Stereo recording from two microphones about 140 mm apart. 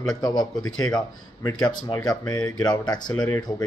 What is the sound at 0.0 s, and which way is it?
A man's voice, 25° left (ahead or behind).